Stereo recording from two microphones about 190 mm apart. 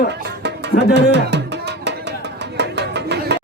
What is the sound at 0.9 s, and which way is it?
Music, 65° right (ahead or behind).